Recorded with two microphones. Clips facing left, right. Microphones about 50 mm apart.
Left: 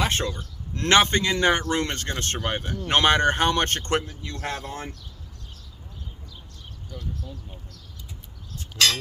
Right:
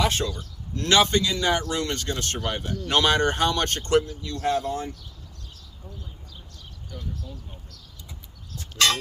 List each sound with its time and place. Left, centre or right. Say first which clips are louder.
0.0 s a man's voice: right 1 dB; left